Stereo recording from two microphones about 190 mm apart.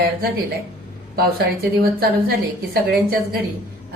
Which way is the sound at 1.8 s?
55° right (ahead or behind).